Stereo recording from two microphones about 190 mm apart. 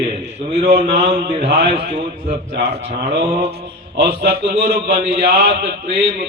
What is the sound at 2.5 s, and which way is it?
Mantra, 60° right (ahead or behind).